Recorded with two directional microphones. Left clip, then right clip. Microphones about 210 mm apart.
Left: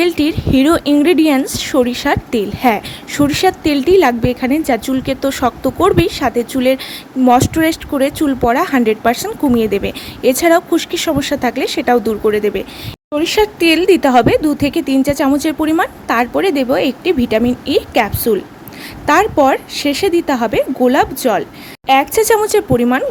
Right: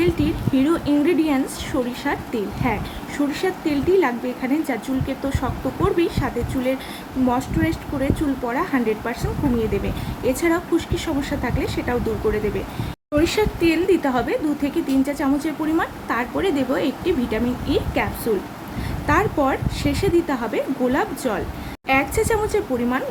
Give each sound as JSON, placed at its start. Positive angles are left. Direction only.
{"t": 0.0, "sound": "speech", "side_deg": 50}
{"t": 13.1, "sound": "speech", "side_deg": 40}